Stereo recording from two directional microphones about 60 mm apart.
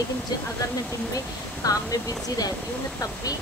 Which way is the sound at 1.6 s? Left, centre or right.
Left.